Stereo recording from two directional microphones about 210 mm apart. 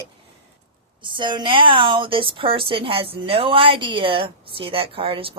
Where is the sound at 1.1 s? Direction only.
20° right (ahead or behind).